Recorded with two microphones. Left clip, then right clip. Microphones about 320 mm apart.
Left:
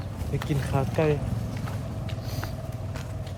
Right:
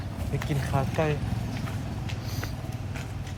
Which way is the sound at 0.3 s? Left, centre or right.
Centre.